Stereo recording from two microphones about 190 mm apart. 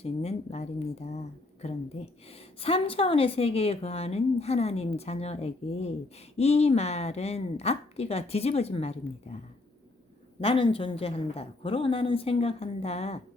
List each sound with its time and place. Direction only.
0.0 s a woman's voice: 35° left (ahead or behind)
10.4 s a woman's voice: 30° left (ahead or behind)